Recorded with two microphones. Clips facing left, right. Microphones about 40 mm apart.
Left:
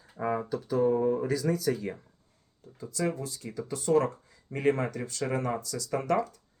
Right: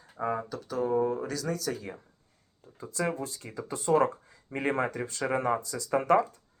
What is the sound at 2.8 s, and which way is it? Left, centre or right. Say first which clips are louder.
Speech: even; right.